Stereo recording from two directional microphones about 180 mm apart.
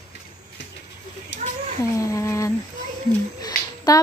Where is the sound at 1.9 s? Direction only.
15° left (ahead or behind).